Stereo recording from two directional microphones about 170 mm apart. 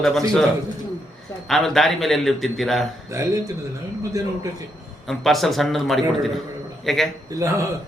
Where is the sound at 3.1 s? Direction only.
20° right (ahead or behind).